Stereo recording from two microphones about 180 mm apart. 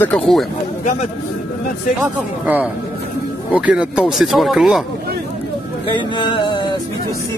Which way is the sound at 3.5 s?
5° right (ahead or behind).